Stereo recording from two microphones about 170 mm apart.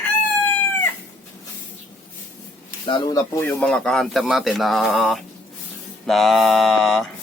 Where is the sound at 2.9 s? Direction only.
25° left (ahead or behind).